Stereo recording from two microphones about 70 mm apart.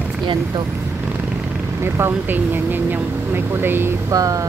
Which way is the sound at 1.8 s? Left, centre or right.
Right.